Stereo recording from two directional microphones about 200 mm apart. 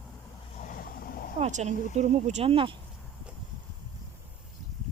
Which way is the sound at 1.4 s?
35° right (ahead or behind).